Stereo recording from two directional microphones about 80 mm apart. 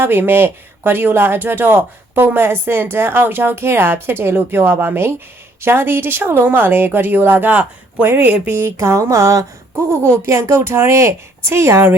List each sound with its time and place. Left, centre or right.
0.0 s speech: right
8.7 s speech: right